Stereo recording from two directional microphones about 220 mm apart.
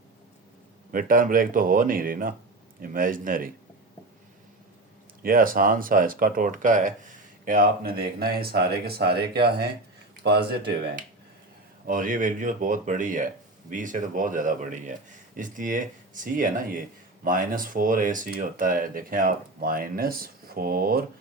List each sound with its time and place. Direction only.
0.9 s speech: 40° right (ahead or behind)
5.2 s speech: 40° right (ahead or behind)